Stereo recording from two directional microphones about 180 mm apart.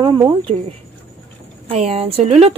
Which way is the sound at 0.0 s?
25° right (ahead or behind).